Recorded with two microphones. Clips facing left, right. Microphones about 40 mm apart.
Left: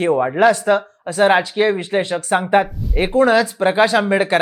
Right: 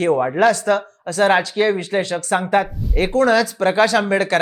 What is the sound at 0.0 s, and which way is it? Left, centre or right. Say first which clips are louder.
Speech: left 1 dB; centre.